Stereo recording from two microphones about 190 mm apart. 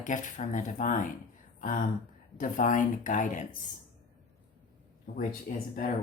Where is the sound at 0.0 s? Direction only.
40° left (ahead or behind).